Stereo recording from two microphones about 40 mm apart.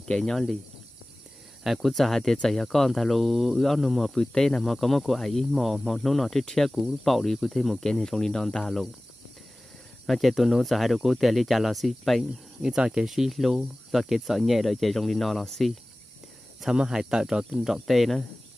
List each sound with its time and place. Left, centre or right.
0.2 s speech: centre
1.6 s speech: centre
1.9 s speech: centre
6.7 s speech: centre
10.0 s speech: centre
12.7 s speech: right
13.0 s speech: centre
16.6 s speech: centre